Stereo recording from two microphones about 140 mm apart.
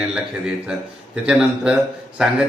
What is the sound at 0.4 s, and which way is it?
A man's voice, 5° right (ahead or behind).